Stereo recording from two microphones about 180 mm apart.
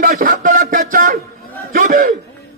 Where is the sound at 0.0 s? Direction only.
50° right (ahead or behind).